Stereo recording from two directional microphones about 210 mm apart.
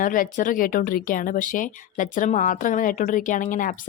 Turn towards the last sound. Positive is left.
turn(degrees=40)  # may be behind; listen again after turning